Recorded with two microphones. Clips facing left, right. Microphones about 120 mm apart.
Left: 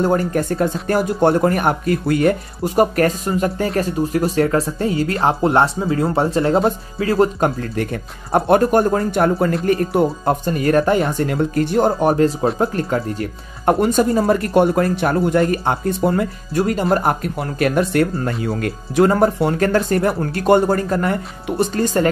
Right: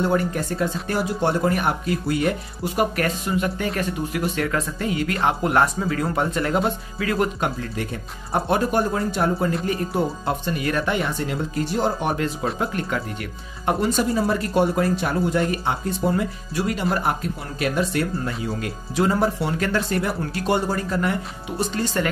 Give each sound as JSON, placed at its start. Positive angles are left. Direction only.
{"t": 0.0, "sound": "speech", "side_deg": 45}
{"t": 7.7, "sound": "speech", "side_deg": 55}
{"t": 10.4, "sound": "speech", "side_deg": 40}
{"t": 12.0, "sound": "speech", "side_deg": 35}
{"t": 13.7, "sound": "speech", "side_deg": 50}